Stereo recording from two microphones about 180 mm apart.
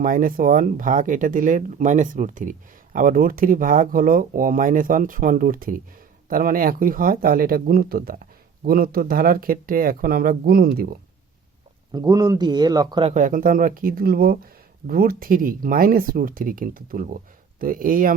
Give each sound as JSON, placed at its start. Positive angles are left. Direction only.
{"t": 0.0, "sound": "speech", "side_deg": -50}
{"t": 11.9, "sound": "a man's voice", "side_deg": -20}
{"t": 13.1, "sound": "speech", "side_deg": -45}